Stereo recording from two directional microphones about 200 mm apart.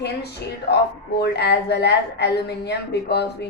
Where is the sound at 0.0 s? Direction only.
55° left (ahead or behind).